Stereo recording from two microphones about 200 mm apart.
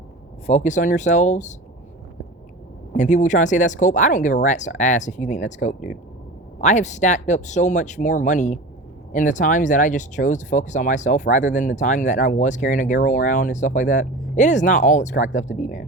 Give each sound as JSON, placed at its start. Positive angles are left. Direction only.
{"t": 0.4, "sound": "speech", "side_deg": 35}
{"t": 2.9, "sound": "speech", "side_deg": 35}